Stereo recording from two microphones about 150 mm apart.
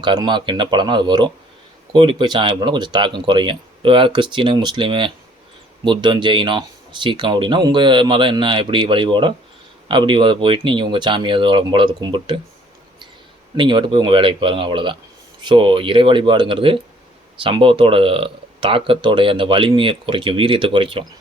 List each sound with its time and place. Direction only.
0.0 s speech: 30° right (ahead or behind)
13.6 s speech: 30° right (ahead or behind)